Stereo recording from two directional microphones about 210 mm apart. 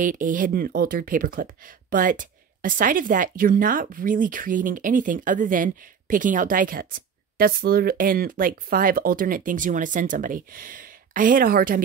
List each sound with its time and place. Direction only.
0.0 s speech: 40° right (ahead or behind)